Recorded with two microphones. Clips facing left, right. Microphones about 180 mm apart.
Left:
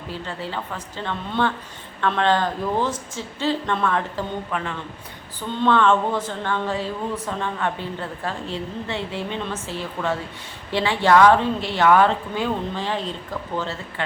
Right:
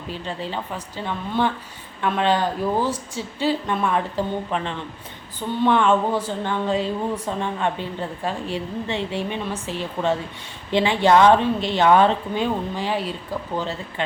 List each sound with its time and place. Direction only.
0.1 s a woman's voice: 15° right (ahead or behind)